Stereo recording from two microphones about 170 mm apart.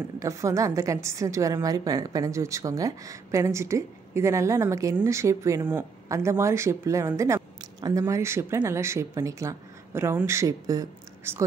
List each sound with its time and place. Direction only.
0.2 s a woman's voice: 20° right (ahead or behind)